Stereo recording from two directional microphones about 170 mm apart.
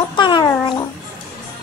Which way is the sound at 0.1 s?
25° left (ahead or behind).